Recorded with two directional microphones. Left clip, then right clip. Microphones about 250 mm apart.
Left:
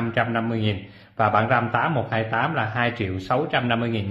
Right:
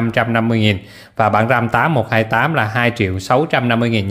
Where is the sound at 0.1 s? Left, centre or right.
Right.